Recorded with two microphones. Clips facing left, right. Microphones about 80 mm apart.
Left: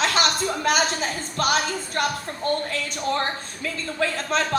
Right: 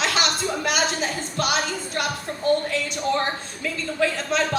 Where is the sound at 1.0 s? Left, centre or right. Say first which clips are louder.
Even; left.